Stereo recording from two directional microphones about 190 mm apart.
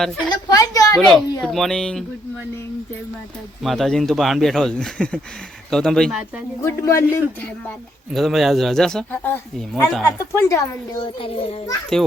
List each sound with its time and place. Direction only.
0.3 s a sound: 20° left (ahead or behind)
0.9 s speech: centre (ahead or behind)
3.6 s speech: centre (ahead or behind)
6.6 s speech: 15° left (ahead or behind)
8.1 s speech: centre (ahead or behind); by 10.6 s 15° left (ahead or behind)
11.0 s a child's voice: 25° left (ahead or behind)